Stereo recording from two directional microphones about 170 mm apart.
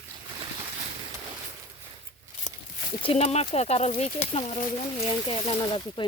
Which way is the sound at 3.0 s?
35° left (ahead or behind).